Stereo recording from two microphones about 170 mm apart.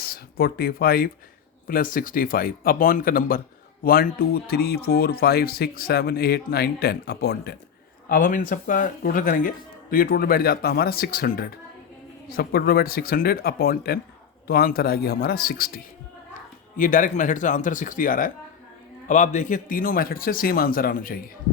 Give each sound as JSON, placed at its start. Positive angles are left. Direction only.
{"t": 0.0, "sound": "speech", "side_deg": 65}
{"t": 8.1, "sound": "speech", "side_deg": 50}